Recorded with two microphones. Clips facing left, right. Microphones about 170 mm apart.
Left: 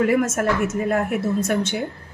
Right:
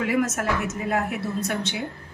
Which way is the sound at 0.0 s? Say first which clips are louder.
Left 5 dB; 50° left (ahead or behind).